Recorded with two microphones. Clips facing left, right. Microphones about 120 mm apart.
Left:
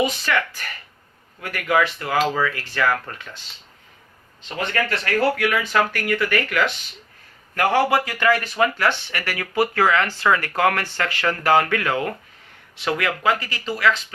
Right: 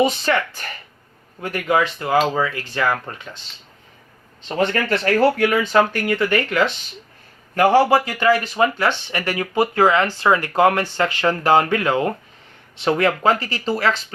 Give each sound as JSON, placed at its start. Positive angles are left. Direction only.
{"t": 0.0, "sound": "speech", "side_deg": -30}
{"t": 4.4, "sound": "speech", "side_deg": -30}